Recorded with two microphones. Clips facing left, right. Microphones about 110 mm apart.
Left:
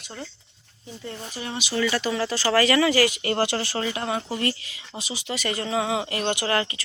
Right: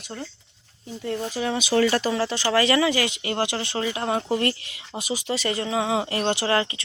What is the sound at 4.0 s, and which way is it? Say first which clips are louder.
Speech: right 3 dB; 45° right (ahead or behind).